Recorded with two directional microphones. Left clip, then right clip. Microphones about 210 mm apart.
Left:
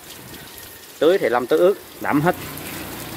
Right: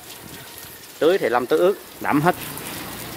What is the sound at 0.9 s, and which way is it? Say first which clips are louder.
Speech: left 1 dB; centre (ahead or behind).